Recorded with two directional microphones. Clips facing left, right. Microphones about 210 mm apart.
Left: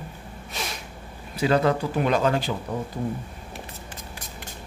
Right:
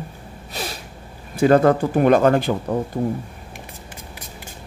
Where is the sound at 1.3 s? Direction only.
50° right (ahead or behind).